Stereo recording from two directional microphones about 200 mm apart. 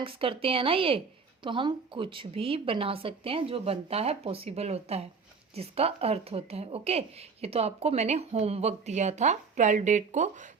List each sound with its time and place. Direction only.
0.0 s a woman's voice: 25° right (ahead or behind)